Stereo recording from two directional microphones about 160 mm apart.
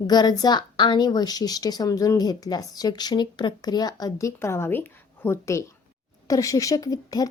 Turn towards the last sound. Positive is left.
turn(degrees=25)  # may be behind; listen again after turning